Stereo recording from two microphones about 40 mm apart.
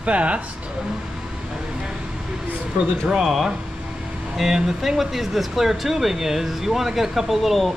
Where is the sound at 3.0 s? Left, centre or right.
Centre.